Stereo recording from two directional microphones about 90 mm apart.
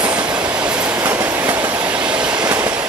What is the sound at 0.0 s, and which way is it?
Train, 15° right (ahead or behind).